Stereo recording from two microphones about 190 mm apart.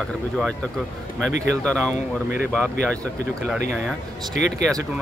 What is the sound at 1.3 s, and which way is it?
Speech, 65° right (ahead or behind).